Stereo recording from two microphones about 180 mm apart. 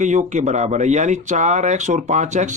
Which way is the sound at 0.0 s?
40° right (ahead or behind).